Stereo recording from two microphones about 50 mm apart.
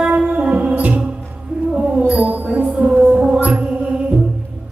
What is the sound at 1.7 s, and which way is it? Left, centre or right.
Music, centre.